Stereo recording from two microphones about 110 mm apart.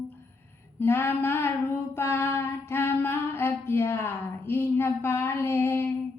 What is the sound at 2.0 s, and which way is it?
Female singing, 20° left (ahead or behind).